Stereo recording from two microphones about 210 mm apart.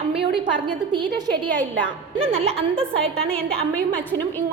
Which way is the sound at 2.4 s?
30° right (ahead or behind).